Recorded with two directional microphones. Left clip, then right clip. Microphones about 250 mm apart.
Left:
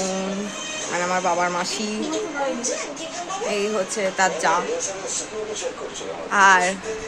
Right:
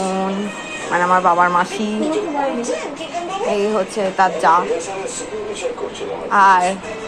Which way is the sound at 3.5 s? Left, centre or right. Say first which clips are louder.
Right 5 dB; centre.